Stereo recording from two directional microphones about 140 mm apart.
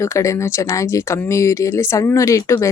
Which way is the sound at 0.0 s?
20° left (ahead or behind).